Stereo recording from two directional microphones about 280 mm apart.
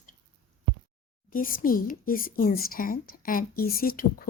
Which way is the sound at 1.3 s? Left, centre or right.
Left.